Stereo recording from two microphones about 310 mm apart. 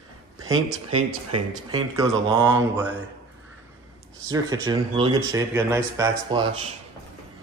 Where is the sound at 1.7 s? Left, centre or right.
Centre.